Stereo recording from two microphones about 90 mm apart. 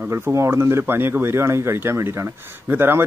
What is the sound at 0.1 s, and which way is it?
Speech, 30° right (ahead or behind).